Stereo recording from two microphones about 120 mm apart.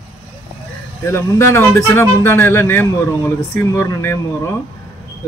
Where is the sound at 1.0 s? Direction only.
20° left (ahead or behind).